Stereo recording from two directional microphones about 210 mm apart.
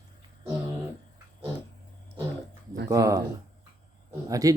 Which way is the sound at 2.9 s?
15° right (ahead or behind).